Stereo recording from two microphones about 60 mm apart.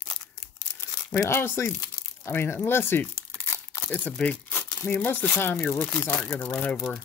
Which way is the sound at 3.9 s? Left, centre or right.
Left.